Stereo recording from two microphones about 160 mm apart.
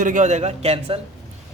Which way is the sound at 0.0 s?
55° right (ahead or behind).